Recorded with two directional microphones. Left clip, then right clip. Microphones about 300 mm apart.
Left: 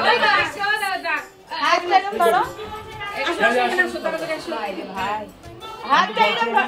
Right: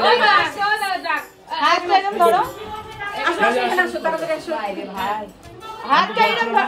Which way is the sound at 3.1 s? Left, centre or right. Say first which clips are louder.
Right 3 dB; centre.